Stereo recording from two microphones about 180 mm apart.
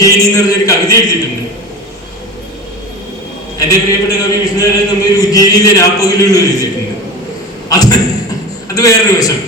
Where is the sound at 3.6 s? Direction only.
20° left (ahead or behind).